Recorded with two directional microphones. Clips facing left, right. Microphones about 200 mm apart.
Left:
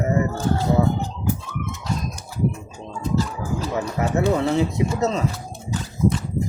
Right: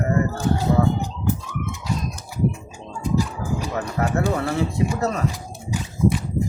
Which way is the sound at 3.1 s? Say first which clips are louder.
Right 1 dB; 15° right (ahead or behind).